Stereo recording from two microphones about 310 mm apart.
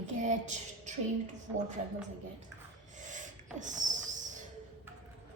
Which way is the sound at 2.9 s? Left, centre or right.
Right.